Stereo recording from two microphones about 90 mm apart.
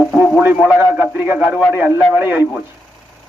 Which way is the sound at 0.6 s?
15° right (ahead or behind).